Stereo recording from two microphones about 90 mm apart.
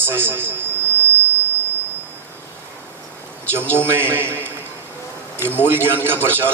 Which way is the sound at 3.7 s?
25° right (ahead or behind).